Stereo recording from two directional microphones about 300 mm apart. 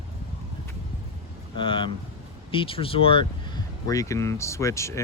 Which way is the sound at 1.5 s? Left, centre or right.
Centre.